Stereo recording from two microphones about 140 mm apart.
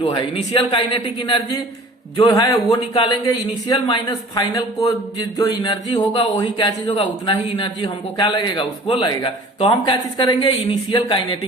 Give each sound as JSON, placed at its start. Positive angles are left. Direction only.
{"t": 0.0, "sound": "speech", "side_deg": 35}
{"t": 2.2, "sound": "speech", "side_deg": 25}
{"t": 2.9, "sound": "speech", "side_deg": 35}